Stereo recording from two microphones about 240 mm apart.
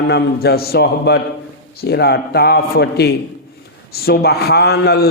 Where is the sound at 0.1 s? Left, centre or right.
Left.